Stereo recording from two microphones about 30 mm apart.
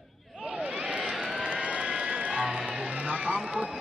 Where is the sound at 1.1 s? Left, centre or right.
Centre.